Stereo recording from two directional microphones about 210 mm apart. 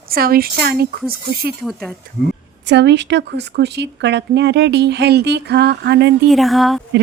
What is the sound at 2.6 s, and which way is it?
Speech, 55° right (ahead or behind).